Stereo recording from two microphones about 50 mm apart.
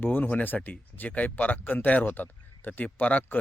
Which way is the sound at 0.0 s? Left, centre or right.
Left.